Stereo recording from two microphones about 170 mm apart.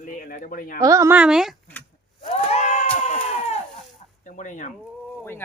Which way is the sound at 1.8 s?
10° left (ahead or behind).